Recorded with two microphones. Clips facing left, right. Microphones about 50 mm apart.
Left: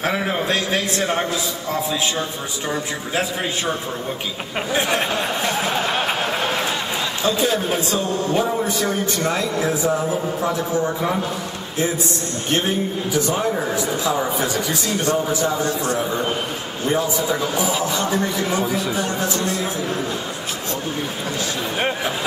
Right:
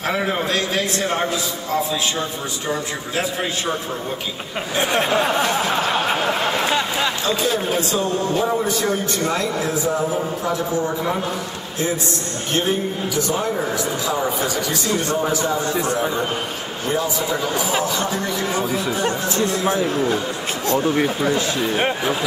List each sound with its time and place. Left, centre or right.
0.1 s a man's voice: centre
9.4 s a man's voice: centre
14.0 s speech: left
17.8 s speech: left
19.0 s speech: right